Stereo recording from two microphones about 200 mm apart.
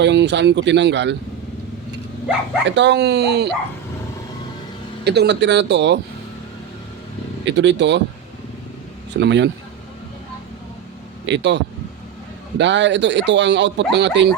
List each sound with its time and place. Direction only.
0.0 s speech: 60° right (ahead or behind)
2.6 s speech: 60° right (ahead or behind)
5.0 s speech: 55° right (ahead or behind)
7.4 s speech: 65° right (ahead or behind)
9.2 s speech: 60° right (ahead or behind)
11.3 s speech: 60° right (ahead or behind)